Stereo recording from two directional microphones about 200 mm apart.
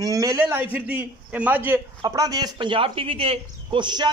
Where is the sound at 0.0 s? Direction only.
15° right (ahead or behind).